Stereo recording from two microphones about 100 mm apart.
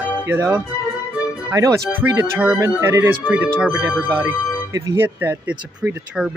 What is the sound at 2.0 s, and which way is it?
Speech, 20° right (ahead or behind).